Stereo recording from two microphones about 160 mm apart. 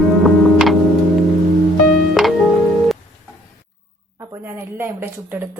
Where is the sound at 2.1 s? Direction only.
Centre (ahead or behind).